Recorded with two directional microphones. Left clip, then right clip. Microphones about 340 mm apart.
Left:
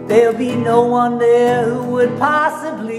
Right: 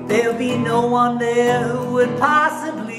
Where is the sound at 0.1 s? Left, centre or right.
Centre.